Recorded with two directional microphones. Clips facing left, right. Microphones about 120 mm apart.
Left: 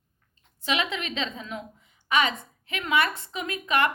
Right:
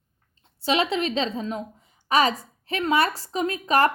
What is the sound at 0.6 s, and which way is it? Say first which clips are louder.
A woman's voice: right 6 dB; 30° right (ahead or behind).